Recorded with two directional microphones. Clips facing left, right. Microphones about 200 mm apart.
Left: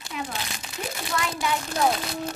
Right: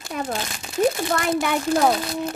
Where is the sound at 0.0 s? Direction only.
45° right (ahead or behind).